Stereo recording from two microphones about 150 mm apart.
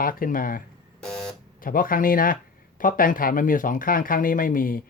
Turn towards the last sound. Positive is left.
turn(degrees=65)  # may be behind; listen again after turning